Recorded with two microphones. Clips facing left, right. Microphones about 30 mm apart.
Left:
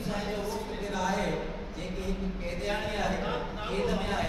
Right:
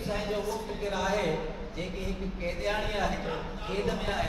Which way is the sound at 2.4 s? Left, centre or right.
Centre.